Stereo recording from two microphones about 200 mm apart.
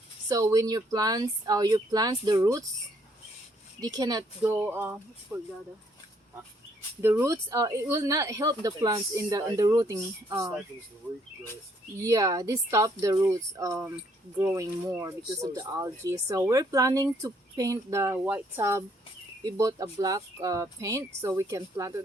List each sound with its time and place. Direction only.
0.3 s speech: 15° right (ahead or behind)
3.8 s speech: 20° right (ahead or behind)
7.0 s speech: 10° right (ahead or behind)
12.0 s speech: 15° right (ahead or behind)